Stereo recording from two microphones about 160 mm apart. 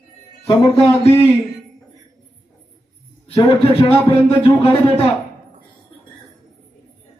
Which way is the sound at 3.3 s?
35° left (ahead or behind).